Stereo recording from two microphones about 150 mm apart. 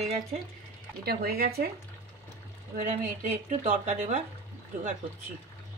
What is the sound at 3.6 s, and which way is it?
Speech, 55° right (ahead or behind).